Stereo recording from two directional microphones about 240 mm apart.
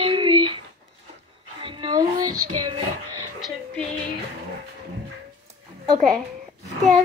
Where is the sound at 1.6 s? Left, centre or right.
Centre.